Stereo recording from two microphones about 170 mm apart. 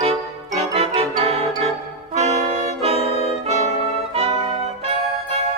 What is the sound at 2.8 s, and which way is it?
Saxophone, 35° right (ahead or behind).